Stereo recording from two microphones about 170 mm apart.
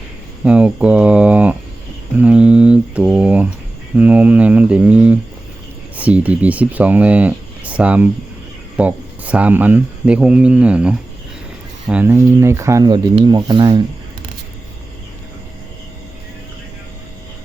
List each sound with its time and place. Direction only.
0.4 s speech: 5° right (ahead or behind); by 13.8 s 25° right (ahead or behind)